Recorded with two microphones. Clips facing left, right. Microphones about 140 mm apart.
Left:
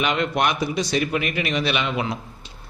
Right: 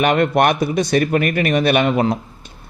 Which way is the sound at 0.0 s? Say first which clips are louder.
Right 7 dB; 55° right (ahead or behind).